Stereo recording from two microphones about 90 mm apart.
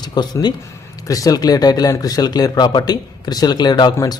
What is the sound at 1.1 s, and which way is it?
Speech, 40° left (ahead or behind).